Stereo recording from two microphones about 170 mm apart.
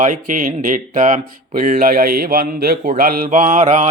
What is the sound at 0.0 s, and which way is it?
Speech, 50° right (ahead or behind).